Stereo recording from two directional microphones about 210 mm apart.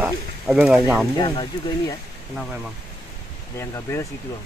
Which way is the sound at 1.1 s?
20° left (ahead or behind).